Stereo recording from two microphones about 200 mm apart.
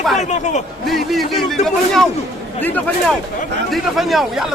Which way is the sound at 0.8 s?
Centre (ahead or behind).